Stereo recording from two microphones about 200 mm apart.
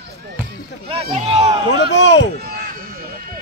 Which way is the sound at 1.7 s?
60° left (ahead or behind).